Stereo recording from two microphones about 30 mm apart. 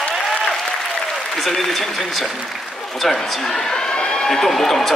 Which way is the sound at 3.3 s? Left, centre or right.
Centre.